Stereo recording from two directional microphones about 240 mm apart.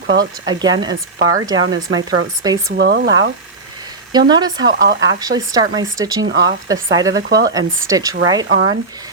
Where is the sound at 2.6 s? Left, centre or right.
Right.